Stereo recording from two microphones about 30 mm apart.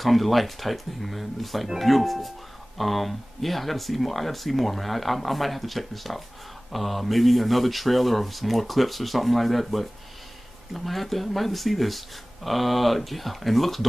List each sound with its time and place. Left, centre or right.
0.0 s speech: centre